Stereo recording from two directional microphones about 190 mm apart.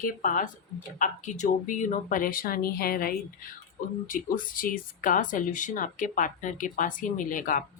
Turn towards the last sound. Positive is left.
turn(degrees=45)  # may be behind; listen again after turning